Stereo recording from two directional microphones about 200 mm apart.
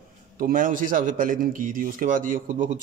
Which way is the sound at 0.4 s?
45° right (ahead or behind).